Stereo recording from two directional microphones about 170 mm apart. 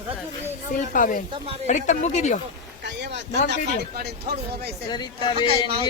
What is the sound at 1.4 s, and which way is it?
Speech, 35° right (ahead or behind).